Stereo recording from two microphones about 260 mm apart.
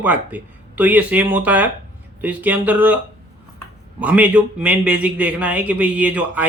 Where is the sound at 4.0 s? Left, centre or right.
Centre.